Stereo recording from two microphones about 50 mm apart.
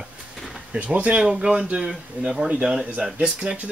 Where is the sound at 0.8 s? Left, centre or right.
Right.